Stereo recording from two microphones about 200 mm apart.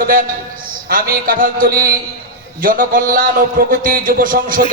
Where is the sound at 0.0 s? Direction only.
45° right (ahead or behind).